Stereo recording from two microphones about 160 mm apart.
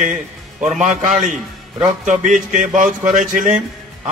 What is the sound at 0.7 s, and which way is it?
Speech, 50° right (ahead or behind).